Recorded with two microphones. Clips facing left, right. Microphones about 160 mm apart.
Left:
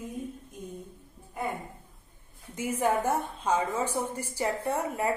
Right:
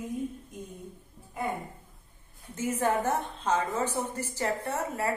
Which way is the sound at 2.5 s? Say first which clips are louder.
Even; 10° left (ahead or behind).